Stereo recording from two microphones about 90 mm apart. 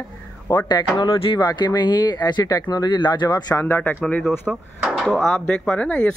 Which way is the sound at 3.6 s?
25° left (ahead or behind).